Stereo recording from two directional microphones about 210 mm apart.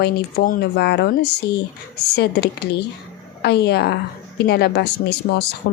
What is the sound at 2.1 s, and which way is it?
A woman's voice, 50° left (ahead or behind).